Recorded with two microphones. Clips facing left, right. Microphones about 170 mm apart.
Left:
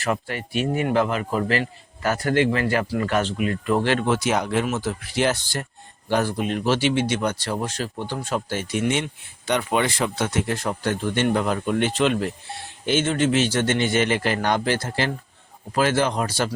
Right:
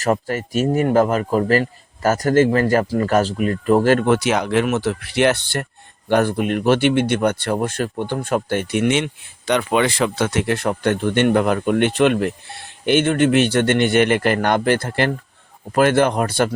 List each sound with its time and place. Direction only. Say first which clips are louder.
0.0 s speech: right 6 dB; 40° right (ahead or behind); by 9.0 s 75° right (ahead or behind)
9.5 s speech: right 4 dB; 90° right; by 16.6 s 55° right (ahead or behind)